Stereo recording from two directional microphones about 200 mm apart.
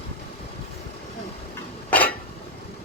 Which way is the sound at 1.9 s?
10° left (ahead or behind).